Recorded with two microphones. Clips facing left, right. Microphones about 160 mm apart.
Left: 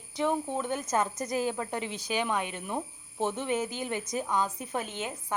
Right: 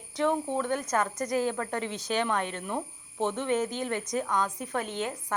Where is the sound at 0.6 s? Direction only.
20° left (ahead or behind).